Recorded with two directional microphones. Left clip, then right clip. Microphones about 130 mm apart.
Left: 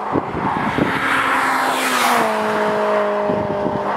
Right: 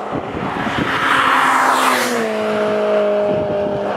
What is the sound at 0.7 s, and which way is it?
Vehicle, 5° right (ahead or behind).